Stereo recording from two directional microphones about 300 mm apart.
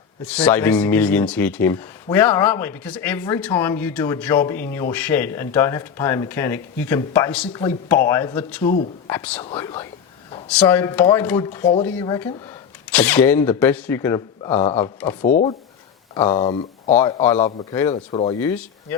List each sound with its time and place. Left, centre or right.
0.3 s speech: centre
15.2 s speech: left; by 18.9 s centre